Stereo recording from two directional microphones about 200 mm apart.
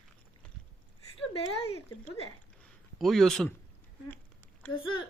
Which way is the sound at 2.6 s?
Centre (ahead or behind).